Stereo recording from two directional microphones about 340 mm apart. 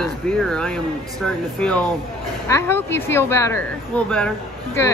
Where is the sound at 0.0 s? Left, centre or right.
Centre.